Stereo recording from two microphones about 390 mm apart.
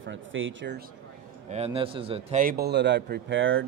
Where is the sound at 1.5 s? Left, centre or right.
Centre.